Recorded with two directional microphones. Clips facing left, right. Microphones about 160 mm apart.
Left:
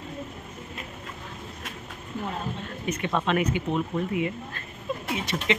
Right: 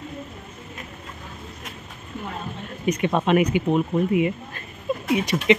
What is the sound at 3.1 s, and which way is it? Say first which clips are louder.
Speech: right 5 dB; 15° right (ahead or behind).